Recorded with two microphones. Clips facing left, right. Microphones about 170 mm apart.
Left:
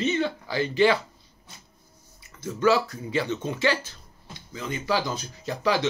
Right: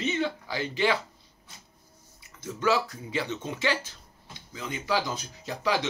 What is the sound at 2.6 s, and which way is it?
A man's voice, 15° right (ahead or behind).